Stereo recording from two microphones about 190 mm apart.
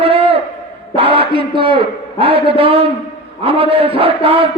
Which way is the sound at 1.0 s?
30° right (ahead or behind).